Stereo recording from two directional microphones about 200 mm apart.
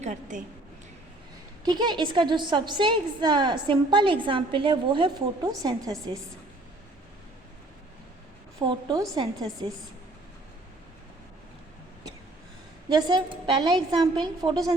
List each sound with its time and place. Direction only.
0.0 s a woman's voice: 40° right (ahead or behind)
1.6 s a woman's voice: 20° right (ahead or behind)
8.5 s a woman's voice: 20° right (ahead or behind)
12.9 s a woman's voice: 20° right (ahead or behind)